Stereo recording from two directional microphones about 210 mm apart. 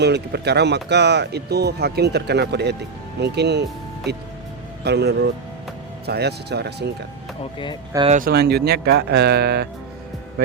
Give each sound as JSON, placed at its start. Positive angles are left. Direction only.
{"t": 0.0, "sound": "speech", "side_deg": -50}
{"t": 7.9, "sound": "speech", "side_deg": -25}
{"t": 8.2, "sound": "speech", "side_deg": -50}